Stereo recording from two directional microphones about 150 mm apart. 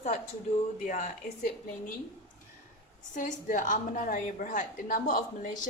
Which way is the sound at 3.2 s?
60° left (ahead or behind).